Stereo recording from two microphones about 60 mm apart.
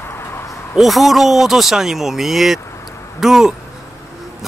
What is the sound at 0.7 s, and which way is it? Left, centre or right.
Speech, centre.